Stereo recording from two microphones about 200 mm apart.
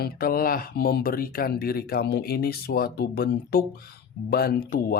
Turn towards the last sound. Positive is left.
turn(degrees=50)  # may be behind; listen again after turning